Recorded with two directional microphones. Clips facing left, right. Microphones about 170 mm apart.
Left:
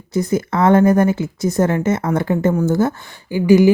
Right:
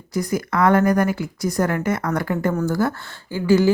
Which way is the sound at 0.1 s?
25° left (ahead or behind).